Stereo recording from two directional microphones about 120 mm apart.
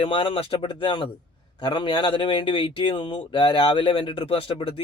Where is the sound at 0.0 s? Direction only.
50° left (ahead or behind).